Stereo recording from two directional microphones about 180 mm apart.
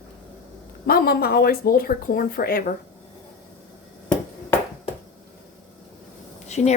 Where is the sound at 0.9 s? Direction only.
55° left (ahead or behind).